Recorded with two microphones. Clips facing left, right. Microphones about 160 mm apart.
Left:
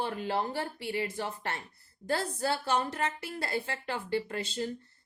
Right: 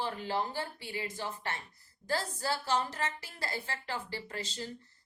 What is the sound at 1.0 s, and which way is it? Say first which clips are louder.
A woman's voice: left 3 dB; 55° left (ahead or behind).